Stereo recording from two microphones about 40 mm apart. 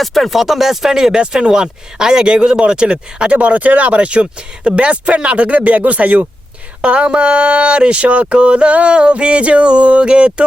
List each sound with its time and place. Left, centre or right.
0.0 s speech: centre; by 3.3 s right
3.3 s speech: right
6.8 s a sound: right